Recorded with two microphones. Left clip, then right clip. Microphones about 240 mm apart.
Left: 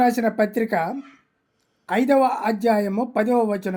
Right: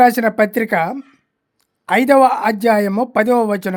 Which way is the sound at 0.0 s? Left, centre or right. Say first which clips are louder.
Right 7 dB; right.